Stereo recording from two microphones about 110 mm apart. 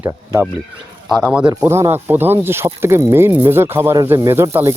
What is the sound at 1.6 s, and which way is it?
Speech, 20° right (ahead or behind).